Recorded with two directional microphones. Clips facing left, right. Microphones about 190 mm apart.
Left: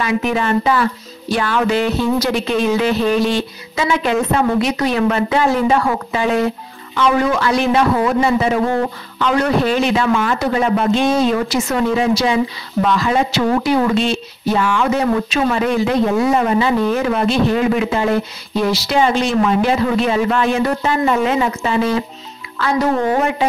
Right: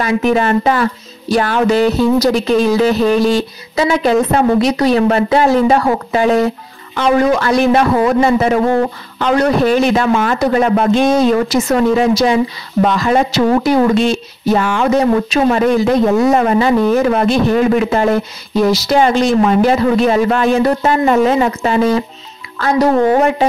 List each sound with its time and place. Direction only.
0.0 s speech: 40° right (ahead or behind)